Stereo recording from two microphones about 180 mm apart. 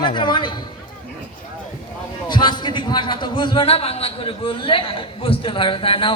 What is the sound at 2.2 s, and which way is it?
A man's voice, 25° left (ahead or behind).